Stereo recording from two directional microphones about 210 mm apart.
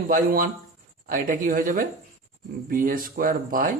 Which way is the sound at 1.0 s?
40° right (ahead or behind).